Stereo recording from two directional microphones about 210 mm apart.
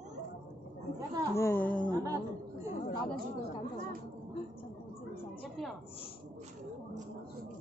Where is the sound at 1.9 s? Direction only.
15° right (ahead or behind).